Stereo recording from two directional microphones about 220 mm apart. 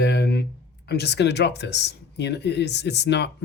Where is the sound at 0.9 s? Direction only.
50° left (ahead or behind).